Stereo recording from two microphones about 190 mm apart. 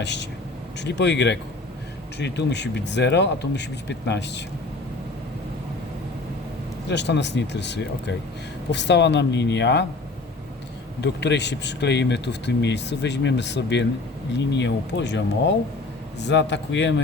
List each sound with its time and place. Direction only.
0.0 s speech: 65° left (ahead or behind)
6.8 s speech: 65° left (ahead or behind)
11.0 s speech: 65° left (ahead or behind)
16.2 s speech: 65° left (ahead or behind)